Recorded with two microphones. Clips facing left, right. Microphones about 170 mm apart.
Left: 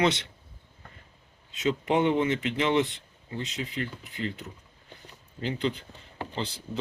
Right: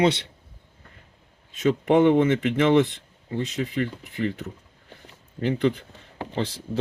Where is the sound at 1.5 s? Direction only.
55° right (ahead or behind).